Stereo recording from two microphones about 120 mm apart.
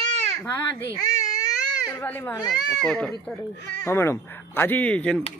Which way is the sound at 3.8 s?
20° left (ahead or behind).